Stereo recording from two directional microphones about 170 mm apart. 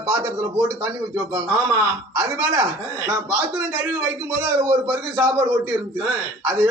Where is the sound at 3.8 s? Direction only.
15° right (ahead or behind).